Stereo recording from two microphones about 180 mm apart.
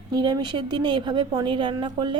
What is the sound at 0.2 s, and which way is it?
A woman's voice, 25° right (ahead or behind).